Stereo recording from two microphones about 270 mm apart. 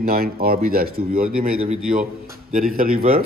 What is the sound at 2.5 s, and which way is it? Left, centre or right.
Speech, right.